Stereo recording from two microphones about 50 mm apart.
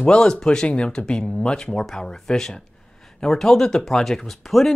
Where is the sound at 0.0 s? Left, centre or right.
Centre.